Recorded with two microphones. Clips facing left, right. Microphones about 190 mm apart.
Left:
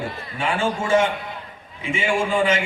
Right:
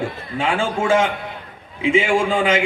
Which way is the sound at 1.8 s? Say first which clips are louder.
Right 6 dB; 90° right.